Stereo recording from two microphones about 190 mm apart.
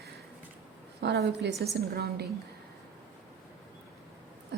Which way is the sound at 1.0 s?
60° right (ahead or behind).